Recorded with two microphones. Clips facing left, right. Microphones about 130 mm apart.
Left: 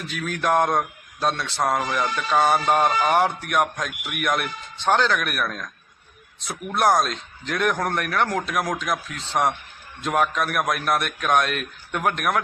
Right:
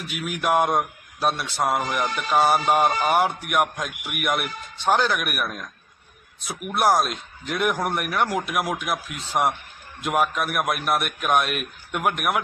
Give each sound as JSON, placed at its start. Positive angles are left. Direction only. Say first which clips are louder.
{"t": 0.1, "sound": "a man's voice", "louder": "even", "side_deg": -10}